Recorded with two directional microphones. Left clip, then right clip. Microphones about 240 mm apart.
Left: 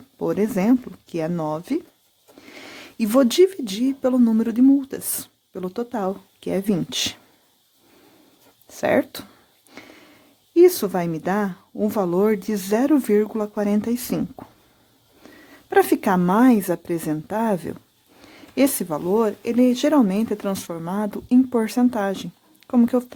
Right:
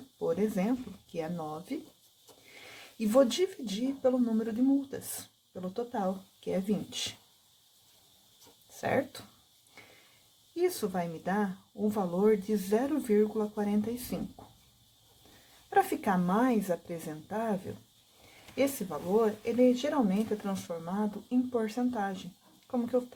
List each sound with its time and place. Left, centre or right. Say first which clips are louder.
0.3 s speech: left 10 dB; left
8.8 s speech: left 11 dB; left
10.5 s speech: left 16 dB; left
15.7 s speech: left 10 dB; left